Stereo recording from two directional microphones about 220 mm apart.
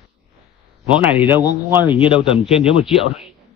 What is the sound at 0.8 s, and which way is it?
Speech, 5° right (ahead or behind).